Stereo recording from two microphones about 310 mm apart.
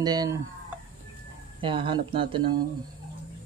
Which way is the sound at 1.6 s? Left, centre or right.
Centre.